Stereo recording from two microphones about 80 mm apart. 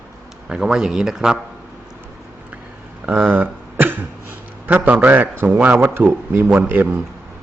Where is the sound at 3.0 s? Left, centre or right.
Centre.